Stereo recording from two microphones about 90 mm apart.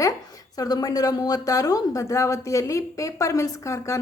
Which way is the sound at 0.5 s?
45° left (ahead or behind).